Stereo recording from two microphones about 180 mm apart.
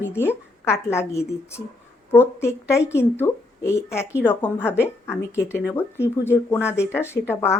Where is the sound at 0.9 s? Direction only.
15° left (ahead or behind).